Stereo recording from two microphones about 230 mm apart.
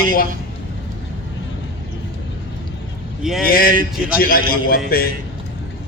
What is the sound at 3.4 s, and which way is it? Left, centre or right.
A man's voice, left.